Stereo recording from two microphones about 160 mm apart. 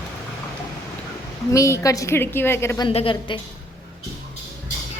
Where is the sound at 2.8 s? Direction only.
35° left (ahead or behind).